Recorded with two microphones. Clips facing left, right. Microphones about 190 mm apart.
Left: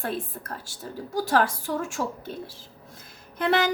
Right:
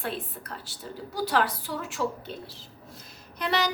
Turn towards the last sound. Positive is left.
turn(degrees=50)  # may be behind; listen again after turning